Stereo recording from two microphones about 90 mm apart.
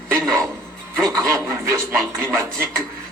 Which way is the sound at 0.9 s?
35° right (ahead or behind).